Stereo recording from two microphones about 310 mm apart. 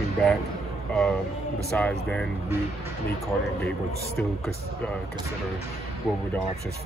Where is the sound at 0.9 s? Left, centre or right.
Centre.